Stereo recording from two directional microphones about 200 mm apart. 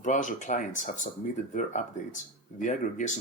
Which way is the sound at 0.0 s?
40° left (ahead or behind).